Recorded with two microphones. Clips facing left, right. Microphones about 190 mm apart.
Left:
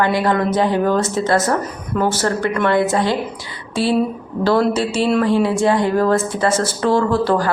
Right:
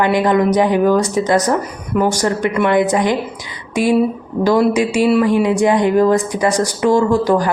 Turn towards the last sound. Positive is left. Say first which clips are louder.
# right 3 dB
turn(degrees=-15)  # may be behind; listen again after turning